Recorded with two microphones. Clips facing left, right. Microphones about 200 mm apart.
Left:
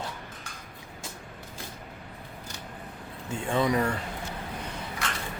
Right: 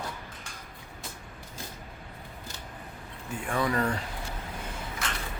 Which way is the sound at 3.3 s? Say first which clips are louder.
Left 3 dB; 25° left (ahead or behind).